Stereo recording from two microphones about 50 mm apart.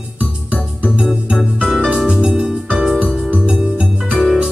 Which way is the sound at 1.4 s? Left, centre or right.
Centre.